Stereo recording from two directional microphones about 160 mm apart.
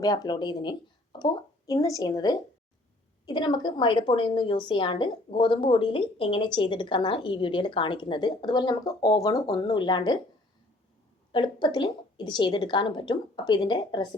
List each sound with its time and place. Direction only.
0.0 s a woman's voice: 25° left (ahead or behind)
11.3 s a woman's voice: 30° left (ahead or behind)